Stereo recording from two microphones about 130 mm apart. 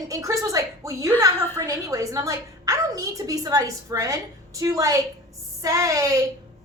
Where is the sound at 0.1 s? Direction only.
25° right (ahead or behind).